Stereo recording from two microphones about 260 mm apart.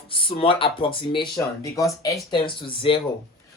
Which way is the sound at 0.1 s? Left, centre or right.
Centre.